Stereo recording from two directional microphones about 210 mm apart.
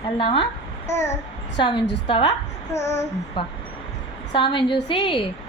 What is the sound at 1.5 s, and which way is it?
Speech, 25° left (ahead or behind).